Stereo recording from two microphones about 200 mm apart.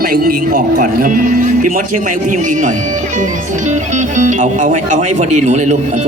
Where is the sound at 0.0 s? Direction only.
45° right (ahead or behind).